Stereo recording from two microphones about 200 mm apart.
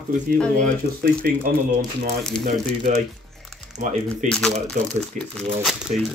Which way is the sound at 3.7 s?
35° right (ahead or behind).